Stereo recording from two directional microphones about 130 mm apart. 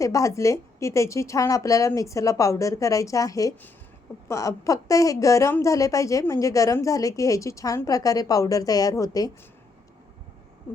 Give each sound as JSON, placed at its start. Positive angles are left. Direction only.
{"t": 0.0, "sound": "a woman's voice", "side_deg": 25}